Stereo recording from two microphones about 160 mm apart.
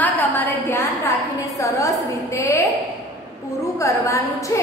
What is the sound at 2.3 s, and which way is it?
Speech, 20° left (ahead or behind).